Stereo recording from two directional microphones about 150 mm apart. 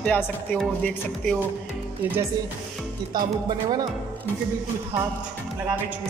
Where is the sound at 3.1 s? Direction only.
30° right (ahead or behind).